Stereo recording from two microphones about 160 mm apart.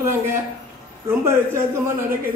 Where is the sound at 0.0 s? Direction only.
15° right (ahead or behind).